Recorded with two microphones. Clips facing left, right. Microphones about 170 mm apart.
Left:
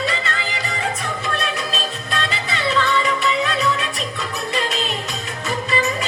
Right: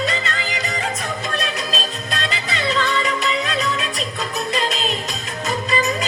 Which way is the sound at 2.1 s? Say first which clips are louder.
Left 1 dB; 40° right (ahead or behind).